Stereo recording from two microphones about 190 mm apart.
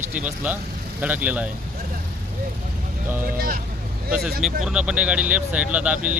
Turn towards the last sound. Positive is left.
turn(degrees=-5)  # may be behind; listen again after turning